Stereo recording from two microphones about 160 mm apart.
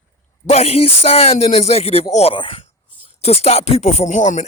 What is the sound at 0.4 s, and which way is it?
Speech, 40° left (ahead or behind).